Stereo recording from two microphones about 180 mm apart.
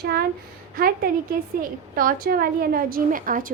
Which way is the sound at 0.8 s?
55° right (ahead or behind).